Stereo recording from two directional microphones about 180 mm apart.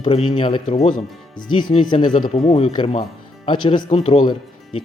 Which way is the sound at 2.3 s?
35° left (ahead or behind).